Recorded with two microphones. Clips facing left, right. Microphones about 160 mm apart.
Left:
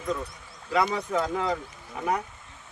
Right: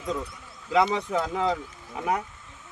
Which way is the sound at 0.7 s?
20° right (ahead or behind).